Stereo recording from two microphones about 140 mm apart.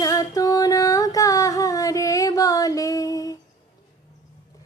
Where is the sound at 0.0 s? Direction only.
25° left (ahead or behind).